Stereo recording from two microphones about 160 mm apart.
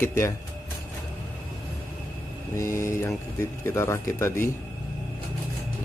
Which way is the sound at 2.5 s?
20° left (ahead or behind).